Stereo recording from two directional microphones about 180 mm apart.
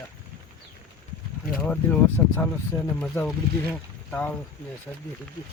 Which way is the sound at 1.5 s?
5° left (ahead or behind).